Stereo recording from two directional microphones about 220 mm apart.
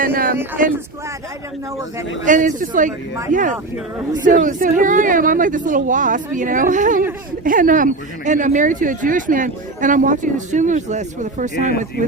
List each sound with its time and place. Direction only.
0.0 s speech: 40° right (ahead or behind)
2.2 s speech: 35° right (ahead or behind)